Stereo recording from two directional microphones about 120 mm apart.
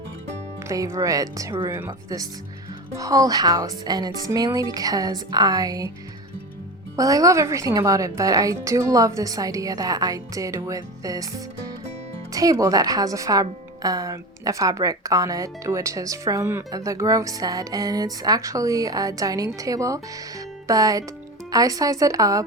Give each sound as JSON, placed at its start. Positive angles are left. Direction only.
{"t": 0.7, "sound": "a woman's voice", "side_deg": -25}
{"t": 1.9, "sound": "speech", "side_deg": -30}
{"t": 6.9, "sound": "a woman's voice", "side_deg": -30}